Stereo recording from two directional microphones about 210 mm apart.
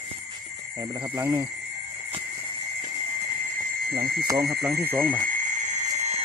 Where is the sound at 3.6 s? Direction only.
50° right (ahead or behind).